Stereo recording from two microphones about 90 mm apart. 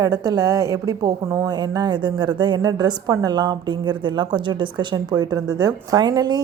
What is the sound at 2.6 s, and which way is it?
A woman's voice, 45° right (ahead or behind).